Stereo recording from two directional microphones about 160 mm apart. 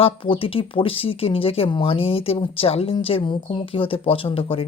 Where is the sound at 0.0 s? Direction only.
35° left (ahead or behind).